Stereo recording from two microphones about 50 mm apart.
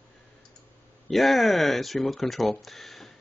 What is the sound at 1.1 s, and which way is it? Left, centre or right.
Speech, centre.